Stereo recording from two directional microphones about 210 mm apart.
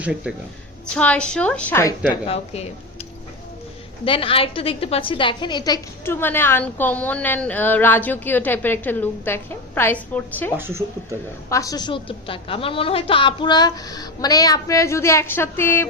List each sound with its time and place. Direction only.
0.0 s a woman's voice: 5° right (ahead or behind); by 2.0 s 10° left (ahead or behind)
2.0 s a woman's voice: 25° left (ahead or behind)
4.0 s a woman's voice: 25° left (ahead or behind); by 10.5 s 10° left (ahead or behind)
10.6 s speech: 10° right (ahead or behind)
11.4 s a woman's voice: 15° left (ahead or behind)